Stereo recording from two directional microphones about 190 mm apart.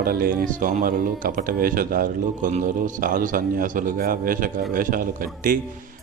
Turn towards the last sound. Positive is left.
turn(degrees=-45)  # may be behind; listen again after turning